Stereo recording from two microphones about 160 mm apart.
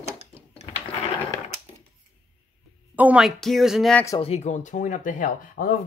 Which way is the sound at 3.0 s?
5° right (ahead or behind).